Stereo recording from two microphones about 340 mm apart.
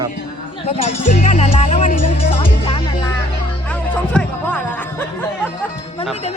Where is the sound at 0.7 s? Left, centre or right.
Centre.